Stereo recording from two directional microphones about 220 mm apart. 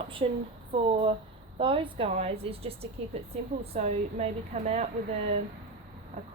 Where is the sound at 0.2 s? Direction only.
30° right (ahead or behind).